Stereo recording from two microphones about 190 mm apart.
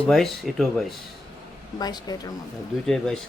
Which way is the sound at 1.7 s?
20° left (ahead or behind).